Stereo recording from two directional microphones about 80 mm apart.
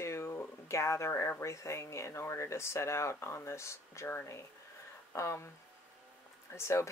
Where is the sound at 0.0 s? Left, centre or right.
Left.